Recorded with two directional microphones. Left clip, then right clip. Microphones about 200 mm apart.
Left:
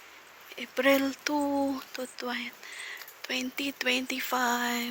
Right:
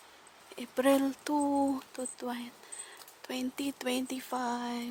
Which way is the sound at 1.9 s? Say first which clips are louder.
Left 4 dB; 20° right (ahead or behind).